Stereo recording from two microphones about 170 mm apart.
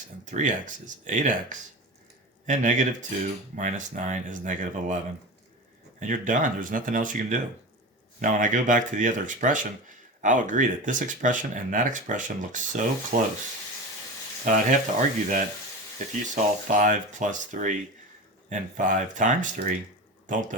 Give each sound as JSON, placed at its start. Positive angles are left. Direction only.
{"t": 0.3, "sound": "speech", "side_deg": -50}
{"t": 6.0, "sound": "speech", "side_deg": -50}
{"t": 14.4, "sound": "speech", "side_deg": -50}